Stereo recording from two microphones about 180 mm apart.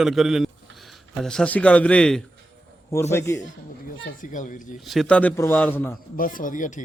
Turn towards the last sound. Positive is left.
turn(degrees=45)  # may be behind; listen again after turning